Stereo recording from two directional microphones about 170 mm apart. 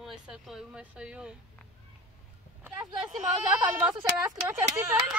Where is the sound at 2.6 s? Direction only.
20° right (ahead or behind).